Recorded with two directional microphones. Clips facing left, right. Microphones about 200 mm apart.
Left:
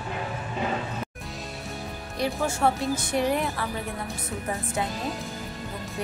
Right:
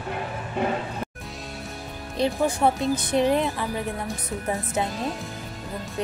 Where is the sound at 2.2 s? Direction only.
15° right (ahead or behind).